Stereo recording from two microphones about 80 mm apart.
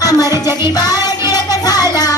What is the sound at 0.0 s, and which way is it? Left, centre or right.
Music, left.